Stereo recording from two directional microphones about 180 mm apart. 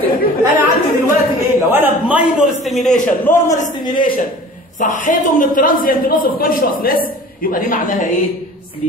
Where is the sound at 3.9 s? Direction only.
50° left (ahead or behind).